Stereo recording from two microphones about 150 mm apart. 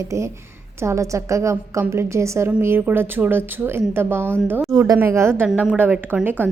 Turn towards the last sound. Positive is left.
turn(degrees=-15)  # may be behind; listen again after turning